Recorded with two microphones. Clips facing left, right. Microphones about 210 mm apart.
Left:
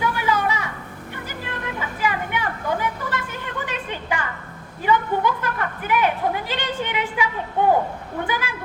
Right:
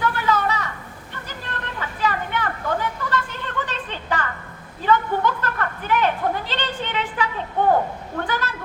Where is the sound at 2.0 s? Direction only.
10° left (ahead or behind).